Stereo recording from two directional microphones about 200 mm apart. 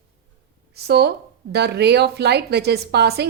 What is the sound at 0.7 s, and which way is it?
Speech, 55° right (ahead or behind).